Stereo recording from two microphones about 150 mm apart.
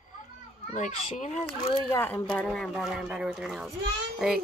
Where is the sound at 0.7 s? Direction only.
50° left (ahead or behind).